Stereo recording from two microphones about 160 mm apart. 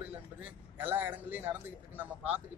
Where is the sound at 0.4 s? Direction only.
10° right (ahead or behind).